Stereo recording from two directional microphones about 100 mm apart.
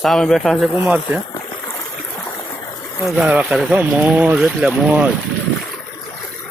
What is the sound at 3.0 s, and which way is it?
Speech, 5° right (ahead or behind).